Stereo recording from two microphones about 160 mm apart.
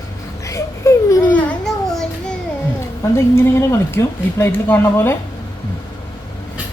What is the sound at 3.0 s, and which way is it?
Speech, 15° left (ahead or behind).